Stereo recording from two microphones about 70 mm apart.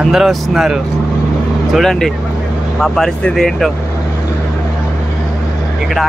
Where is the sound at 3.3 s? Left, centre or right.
Centre.